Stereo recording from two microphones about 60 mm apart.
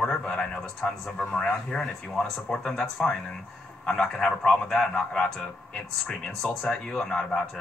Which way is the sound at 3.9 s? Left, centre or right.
Centre.